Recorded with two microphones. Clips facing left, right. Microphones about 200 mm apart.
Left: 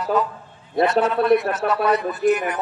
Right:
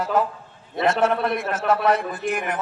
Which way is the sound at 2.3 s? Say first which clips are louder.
Left 7 dB; 50° right (ahead or behind).